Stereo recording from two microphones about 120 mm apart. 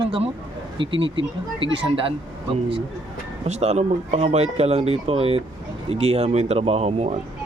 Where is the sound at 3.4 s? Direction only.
65° right (ahead or behind).